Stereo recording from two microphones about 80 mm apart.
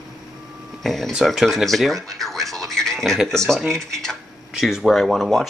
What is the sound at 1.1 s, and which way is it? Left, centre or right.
Speech, centre.